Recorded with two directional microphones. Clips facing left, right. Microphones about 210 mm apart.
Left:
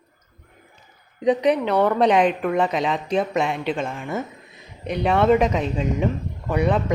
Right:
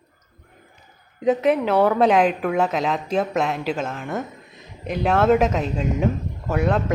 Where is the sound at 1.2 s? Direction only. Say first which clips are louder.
Even; 5° right (ahead or behind).